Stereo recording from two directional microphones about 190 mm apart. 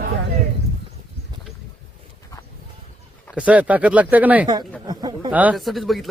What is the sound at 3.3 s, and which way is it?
Speech, 5° right (ahead or behind).